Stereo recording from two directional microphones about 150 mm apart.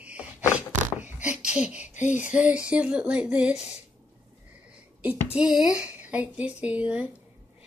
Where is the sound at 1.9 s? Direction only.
55° left (ahead or behind).